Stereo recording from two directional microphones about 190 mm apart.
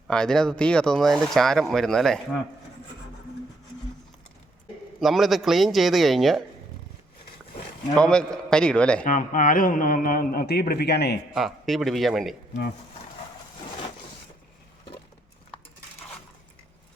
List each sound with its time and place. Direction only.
0.1 s speech: 5° left (ahead or behind)
4.9 s speech: centre (ahead or behind)
7.9 s speech: 5° left (ahead or behind)
9.0 s a man's voice: 45° left (ahead or behind)
11.3 s speech: centre (ahead or behind)